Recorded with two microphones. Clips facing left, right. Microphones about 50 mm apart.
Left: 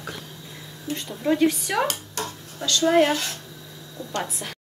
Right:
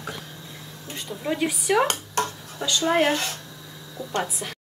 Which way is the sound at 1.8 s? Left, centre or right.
Right.